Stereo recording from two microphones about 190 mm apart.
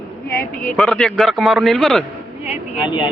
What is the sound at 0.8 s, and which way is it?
A man's voice, 5° left (ahead or behind).